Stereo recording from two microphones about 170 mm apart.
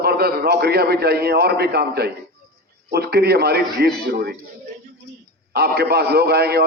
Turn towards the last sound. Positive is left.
turn(degrees=-70)  # may be behind; listen again after turning